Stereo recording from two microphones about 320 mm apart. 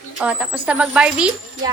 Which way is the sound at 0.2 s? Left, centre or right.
Centre.